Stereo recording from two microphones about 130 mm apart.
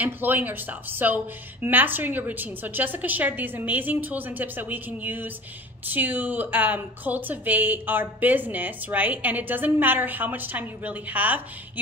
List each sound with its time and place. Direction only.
0.0 s a woman's voice: 15° right (ahead or behind)